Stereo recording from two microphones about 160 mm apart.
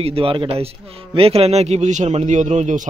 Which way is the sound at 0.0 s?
35° right (ahead or behind).